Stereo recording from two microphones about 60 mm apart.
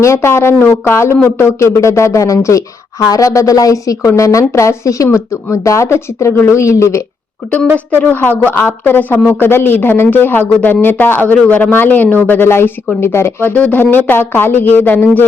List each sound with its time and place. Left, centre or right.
0.0 s speech: left
8.4 s speech: left
13.5 s speech: left